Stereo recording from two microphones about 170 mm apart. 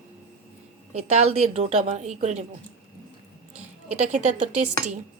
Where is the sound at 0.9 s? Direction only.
40° right (ahead or behind).